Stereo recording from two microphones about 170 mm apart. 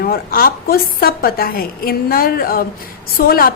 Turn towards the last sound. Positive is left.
turn(degrees=60)  # may be behind; listen again after turning